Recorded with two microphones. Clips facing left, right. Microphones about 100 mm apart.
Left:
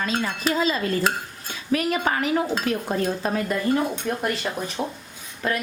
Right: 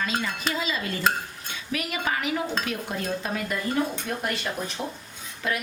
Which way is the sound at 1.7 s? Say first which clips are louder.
Left 6 dB; 40° left (ahead or behind).